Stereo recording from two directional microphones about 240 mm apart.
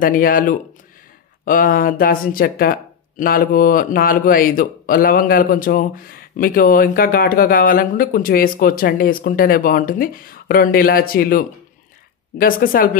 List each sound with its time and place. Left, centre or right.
0.0 s speech: left